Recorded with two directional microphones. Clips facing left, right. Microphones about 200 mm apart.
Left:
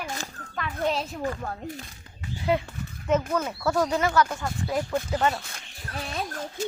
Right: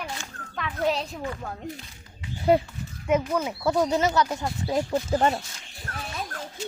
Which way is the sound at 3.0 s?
10° right (ahead or behind).